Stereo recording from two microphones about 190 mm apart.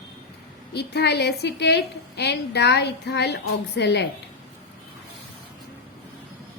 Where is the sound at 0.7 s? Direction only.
60° left (ahead or behind).